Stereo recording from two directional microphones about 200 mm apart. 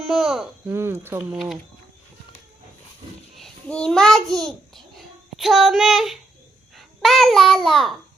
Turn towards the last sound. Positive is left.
turn(degrees=0)  # may be behind; listen again after turning